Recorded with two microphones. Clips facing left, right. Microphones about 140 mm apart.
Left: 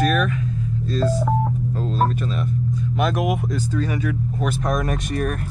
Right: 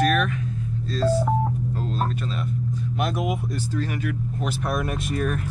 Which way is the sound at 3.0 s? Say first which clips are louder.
Left 4 dB; 80° left.